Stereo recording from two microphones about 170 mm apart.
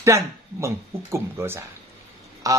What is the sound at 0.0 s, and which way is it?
Speech, 15° right (ahead or behind).